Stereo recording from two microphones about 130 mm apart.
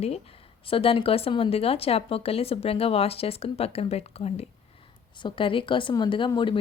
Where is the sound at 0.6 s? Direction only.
45° left (ahead or behind).